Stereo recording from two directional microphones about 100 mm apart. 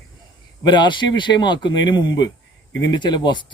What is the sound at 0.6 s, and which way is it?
A man's voice, 50° left (ahead or behind).